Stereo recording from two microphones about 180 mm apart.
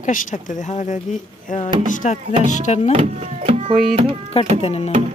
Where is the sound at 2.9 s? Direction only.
35° right (ahead or behind).